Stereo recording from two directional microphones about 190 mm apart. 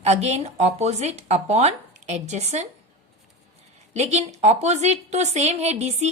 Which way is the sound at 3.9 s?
35° right (ahead or behind).